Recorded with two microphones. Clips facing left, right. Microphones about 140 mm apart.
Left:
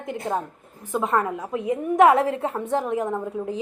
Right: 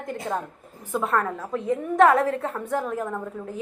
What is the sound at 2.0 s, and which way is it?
A woman's voice, 30° left (ahead or behind).